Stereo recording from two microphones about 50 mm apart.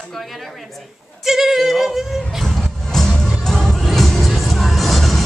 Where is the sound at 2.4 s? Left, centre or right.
Centre.